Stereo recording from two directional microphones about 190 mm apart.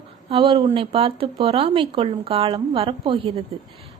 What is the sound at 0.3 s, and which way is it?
A woman's voice, 30° right (ahead or behind).